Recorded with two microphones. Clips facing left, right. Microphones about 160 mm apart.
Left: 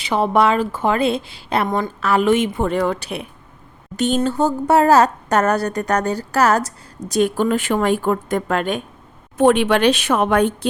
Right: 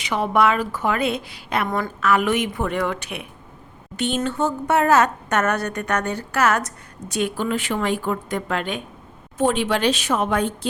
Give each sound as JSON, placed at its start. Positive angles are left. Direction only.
{"t": 0.0, "sound": "a woman's voice", "side_deg": 30}
{"t": 9.4, "sound": "speech", "side_deg": 65}